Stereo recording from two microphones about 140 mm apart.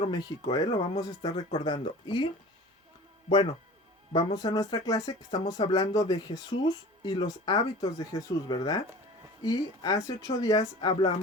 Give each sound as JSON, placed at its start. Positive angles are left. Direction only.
{"t": 0.1, "sound": "speech", "side_deg": 30}
{"t": 4.4, "sound": "speech", "side_deg": 25}